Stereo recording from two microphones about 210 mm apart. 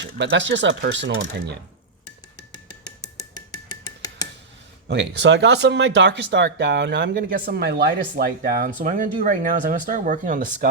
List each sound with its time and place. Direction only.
0.0 s speech: 55° right (ahead or behind)
4.0 s a sound: 15° left (ahead or behind)
4.9 s speech: 55° right (ahead or behind); by 10.7 s 40° right (ahead or behind)